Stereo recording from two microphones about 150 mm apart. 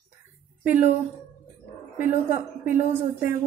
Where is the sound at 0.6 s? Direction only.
15° right (ahead or behind).